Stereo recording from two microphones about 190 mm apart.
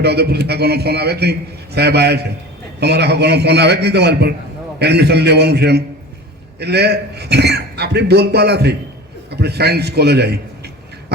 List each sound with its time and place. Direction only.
0.0 s a man's voice: 60° right (ahead or behind)